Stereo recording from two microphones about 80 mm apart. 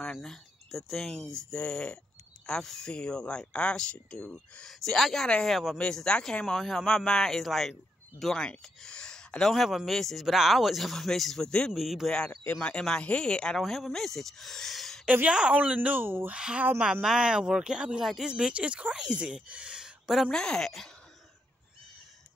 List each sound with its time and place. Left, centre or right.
0.0 s speech: centre
12.4 s speech: centre
15.0 s a woman's voice: centre
16.3 s speech: centre
20.2 s speech: centre